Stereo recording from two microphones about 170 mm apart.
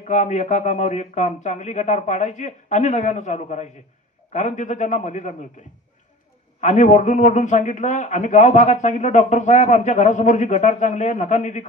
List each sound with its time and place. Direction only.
0.0 s a man's voice: 45° left (ahead or behind)
6.6 s a man's voice: 45° left (ahead or behind)